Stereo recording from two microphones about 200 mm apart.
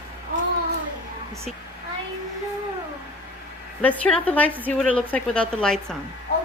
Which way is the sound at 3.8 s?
5° left (ahead or behind).